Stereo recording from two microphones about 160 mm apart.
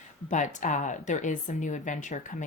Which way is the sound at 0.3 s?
50° left (ahead or behind).